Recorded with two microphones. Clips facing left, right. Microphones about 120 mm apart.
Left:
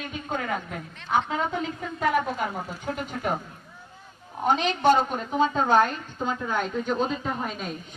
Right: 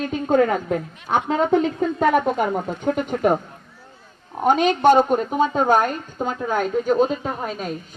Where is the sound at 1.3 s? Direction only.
65° right (ahead or behind).